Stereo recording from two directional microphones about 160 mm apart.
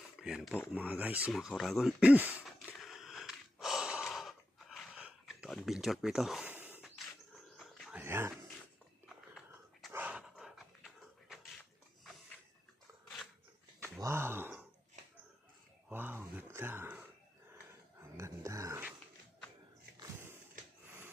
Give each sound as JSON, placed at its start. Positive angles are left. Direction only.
{"t": 0.2, "sound": "speech", "side_deg": -5}
{"t": 2.7, "sound": "gasp", "side_deg": 0}
{"t": 7.8, "sound": "dog", "side_deg": -5}
{"t": 8.0, "sound": "speech", "side_deg": -15}
{"t": 9.9, "sound": "dog", "side_deg": -10}
{"t": 14.0, "sound": "a sound", "side_deg": -15}
{"t": 15.9, "sound": "a sound", "side_deg": -10}
{"t": 18.2, "sound": "dog", "side_deg": -20}
{"t": 20.0, "sound": "a sound", "side_deg": -15}